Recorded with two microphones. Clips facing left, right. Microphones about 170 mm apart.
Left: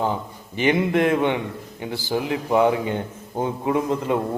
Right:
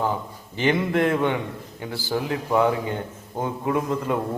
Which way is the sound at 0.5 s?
15° left (ahead or behind).